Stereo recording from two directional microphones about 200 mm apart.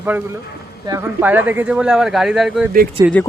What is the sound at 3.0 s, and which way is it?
Speech, 15° right (ahead or behind).